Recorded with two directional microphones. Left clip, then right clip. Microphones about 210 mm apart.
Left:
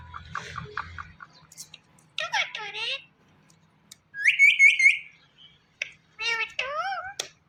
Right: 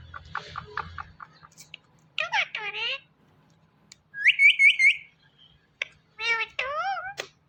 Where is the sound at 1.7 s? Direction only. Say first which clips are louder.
Right 3 dB; 20° right (ahead or behind).